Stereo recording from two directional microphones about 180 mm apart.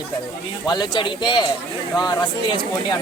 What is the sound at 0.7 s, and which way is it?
Speech, 25° left (ahead or behind).